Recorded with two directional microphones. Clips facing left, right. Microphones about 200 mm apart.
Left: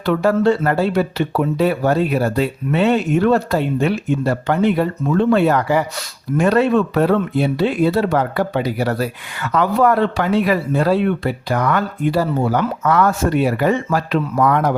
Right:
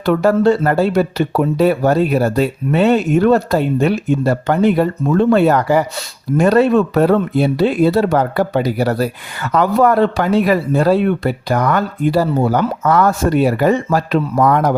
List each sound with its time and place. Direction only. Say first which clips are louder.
0.0 s speech: right 3 dB; 45° right (ahead or behind)